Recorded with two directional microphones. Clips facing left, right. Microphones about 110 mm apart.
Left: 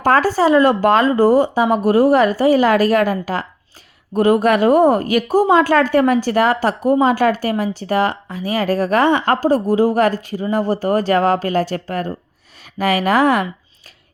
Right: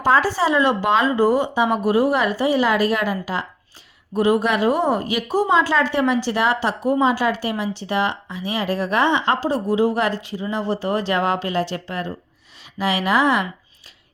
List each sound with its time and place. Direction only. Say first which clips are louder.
0.0 s speech: left 4 dB; 50° left (ahead or behind)